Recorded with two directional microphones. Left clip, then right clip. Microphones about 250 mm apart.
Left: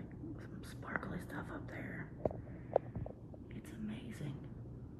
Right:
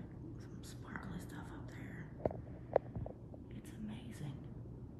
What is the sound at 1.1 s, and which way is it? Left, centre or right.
Whispering, centre.